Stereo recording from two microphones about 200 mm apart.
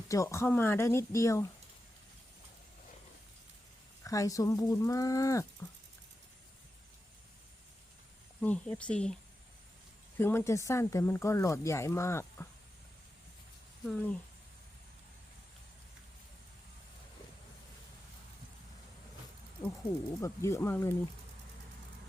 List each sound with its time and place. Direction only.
0.1 s speech: 15° left (ahead or behind)
4.0 s speech: 15° left (ahead or behind)
8.4 s speech: 5° left (ahead or behind)
10.2 s speech: 10° left (ahead or behind)
13.8 s speech: 5° left (ahead or behind)
20.2 s speech: 15° left (ahead or behind)